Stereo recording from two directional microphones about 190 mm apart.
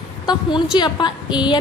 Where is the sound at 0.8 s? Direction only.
25° left (ahead or behind).